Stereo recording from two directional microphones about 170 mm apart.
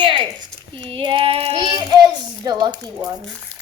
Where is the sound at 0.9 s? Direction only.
30° right (ahead or behind).